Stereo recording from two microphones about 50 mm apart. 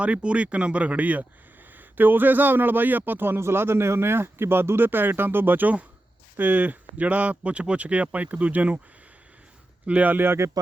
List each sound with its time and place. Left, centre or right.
0.0 s speech: right
9.8 s speech: right
10.2 s speech: right